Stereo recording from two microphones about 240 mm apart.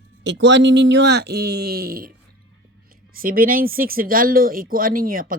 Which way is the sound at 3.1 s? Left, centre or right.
Right.